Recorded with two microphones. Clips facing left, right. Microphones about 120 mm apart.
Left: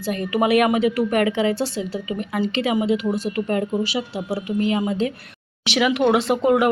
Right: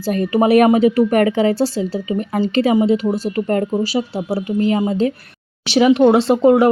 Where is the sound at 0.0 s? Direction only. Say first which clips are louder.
Right 5 dB; 35° right (ahead or behind).